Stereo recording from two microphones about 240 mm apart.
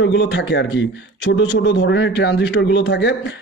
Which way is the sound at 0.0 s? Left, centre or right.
Left.